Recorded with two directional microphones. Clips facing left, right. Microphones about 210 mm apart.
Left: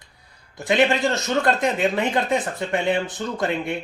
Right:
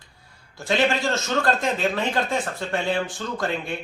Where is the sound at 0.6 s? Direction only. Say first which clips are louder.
Left 3 dB; 20° left (ahead or behind).